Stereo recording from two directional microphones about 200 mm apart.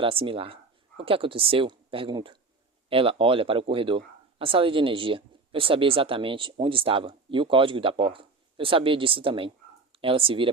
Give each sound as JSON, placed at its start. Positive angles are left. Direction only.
{"t": 0.0, "sound": "speech", "side_deg": -25}